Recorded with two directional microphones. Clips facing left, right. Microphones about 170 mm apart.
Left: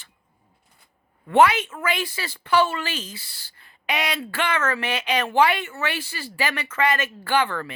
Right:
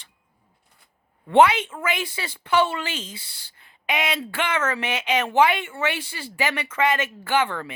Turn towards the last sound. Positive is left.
turn(degrees=-20)  # may be behind; listen again after turning